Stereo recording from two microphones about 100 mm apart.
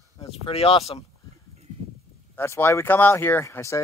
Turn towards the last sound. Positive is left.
turn(degrees=30)  # may be behind; listen again after turning